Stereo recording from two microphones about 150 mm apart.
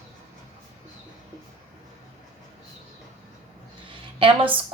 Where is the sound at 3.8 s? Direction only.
35° right (ahead or behind).